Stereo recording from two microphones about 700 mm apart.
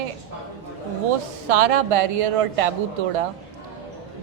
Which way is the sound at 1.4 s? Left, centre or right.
Right.